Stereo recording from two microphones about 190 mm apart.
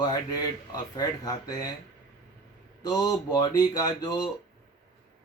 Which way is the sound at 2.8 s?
20° left (ahead or behind).